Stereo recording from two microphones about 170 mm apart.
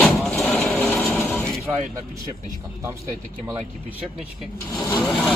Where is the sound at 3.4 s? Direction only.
10° right (ahead or behind).